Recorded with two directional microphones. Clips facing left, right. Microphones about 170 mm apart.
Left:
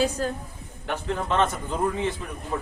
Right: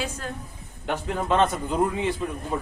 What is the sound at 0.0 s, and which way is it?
Speech, 35° left (ahead or behind).